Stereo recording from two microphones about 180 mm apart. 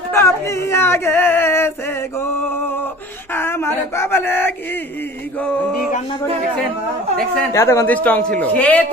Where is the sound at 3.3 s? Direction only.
15° left (ahead or behind).